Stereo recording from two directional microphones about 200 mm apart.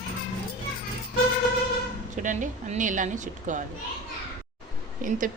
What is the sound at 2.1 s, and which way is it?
Speech, 40° right (ahead or behind).